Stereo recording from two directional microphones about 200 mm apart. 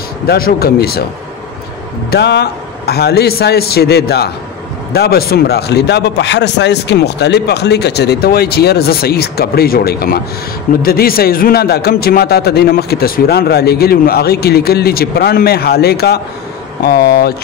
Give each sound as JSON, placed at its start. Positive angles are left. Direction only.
{"t": 0.3, "sound": "a man's voice", "side_deg": 50}
{"t": 2.0, "sound": "a man's voice", "side_deg": 60}